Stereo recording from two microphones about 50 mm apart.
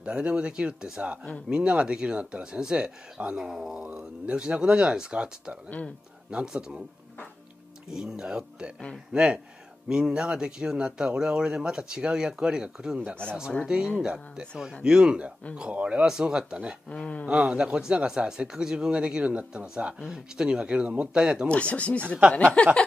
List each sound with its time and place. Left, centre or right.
0.0 s speech: centre
6.3 s speech: centre
7.9 s speech: centre
16.9 s speech: centre
17.3 s speech: centre
21.5 s speech: left